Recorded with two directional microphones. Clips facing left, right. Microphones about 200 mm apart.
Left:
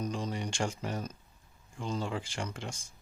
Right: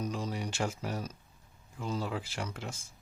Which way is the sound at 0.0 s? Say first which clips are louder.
Even; 5° right (ahead or behind).